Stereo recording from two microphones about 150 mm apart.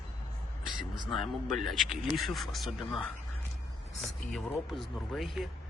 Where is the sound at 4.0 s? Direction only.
Centre (ahead or behind).